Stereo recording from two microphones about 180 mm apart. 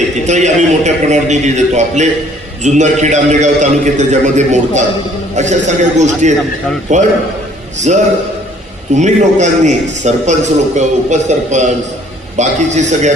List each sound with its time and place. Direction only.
0.3 s a man's voice: 40° right (ahead or behind)